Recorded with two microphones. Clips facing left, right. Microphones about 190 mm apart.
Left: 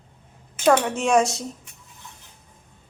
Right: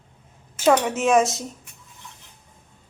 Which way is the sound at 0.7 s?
5° right (ahead or behind).